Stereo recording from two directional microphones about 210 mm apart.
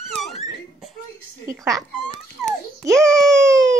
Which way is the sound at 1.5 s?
15° right (ahead or behind).